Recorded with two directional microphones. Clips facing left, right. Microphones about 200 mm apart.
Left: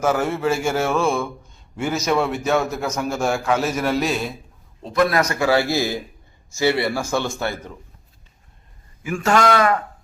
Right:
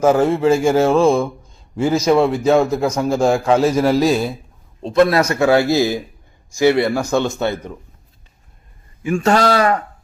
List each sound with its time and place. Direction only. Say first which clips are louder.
0.0 s speech: right 7 dB; 30° right (ahead or behind)
4.8 s a man's voice: right 5 dB; 25° right (ahead or behind)
9.0 s speech: right 3 dB; 30° right (ahead or behind)